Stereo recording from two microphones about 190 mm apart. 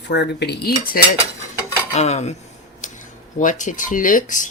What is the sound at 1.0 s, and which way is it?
Speech, 50° left (ahead or behind).